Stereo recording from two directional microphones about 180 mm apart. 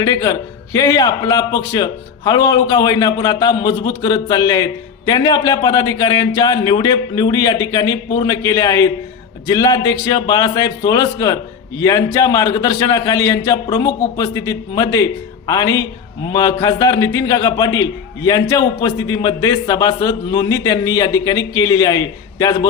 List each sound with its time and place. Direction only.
0.0 s a man's voice: 20° left (ahead or behind)